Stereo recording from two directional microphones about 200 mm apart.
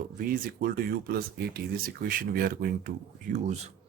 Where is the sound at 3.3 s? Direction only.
35° right (ahead or behind).